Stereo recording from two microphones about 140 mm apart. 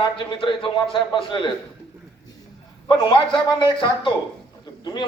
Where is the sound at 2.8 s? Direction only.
35° left (ahead or behind).